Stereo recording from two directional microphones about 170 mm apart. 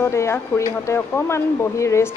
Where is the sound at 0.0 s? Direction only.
15° left (ahead or behind).